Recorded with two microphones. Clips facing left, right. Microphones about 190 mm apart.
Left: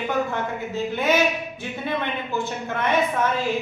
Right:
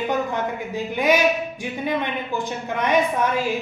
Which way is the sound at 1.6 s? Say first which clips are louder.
Even; 15° right (ahead or behind).